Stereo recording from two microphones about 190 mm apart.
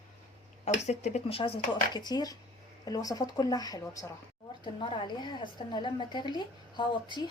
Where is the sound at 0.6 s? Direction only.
35° left (ahead or behind).